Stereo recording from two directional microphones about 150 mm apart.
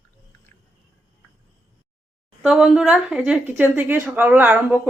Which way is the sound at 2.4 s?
5° right (ahead or behind).